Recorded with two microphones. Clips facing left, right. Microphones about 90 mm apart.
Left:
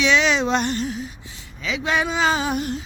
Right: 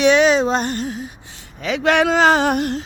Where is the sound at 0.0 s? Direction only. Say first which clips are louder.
Right 5 dB; 45° right (ahead or behind).